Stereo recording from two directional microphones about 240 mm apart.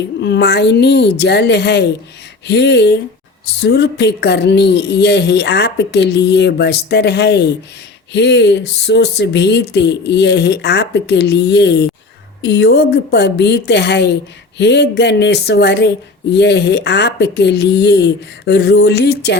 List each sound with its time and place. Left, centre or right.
0.2 s speech: left